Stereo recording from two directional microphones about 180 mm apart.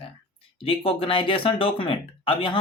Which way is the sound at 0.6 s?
30° left (ahead or behind).